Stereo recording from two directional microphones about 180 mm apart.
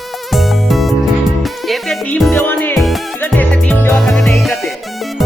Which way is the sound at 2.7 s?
Centre (ahead or behind).